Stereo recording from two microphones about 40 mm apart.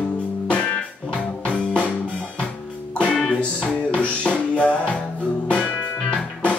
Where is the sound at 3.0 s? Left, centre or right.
Left.